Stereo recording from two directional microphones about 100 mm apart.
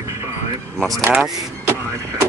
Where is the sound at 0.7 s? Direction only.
Centre (ahead or behind).